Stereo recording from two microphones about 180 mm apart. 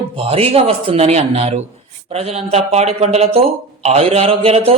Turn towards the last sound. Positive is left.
turn(degrees=-35)  # may be behind; listen again after turning